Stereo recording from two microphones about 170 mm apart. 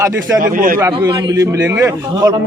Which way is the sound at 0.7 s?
20° right (ahead or behind).